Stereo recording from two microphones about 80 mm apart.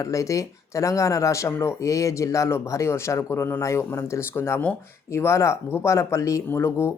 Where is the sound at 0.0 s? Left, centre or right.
Left.